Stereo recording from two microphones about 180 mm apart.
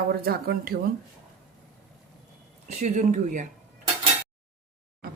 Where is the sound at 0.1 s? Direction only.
60° right (ahead or behind).